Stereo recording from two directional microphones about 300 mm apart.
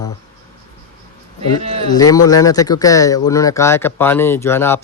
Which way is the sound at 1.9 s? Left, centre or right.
Centre.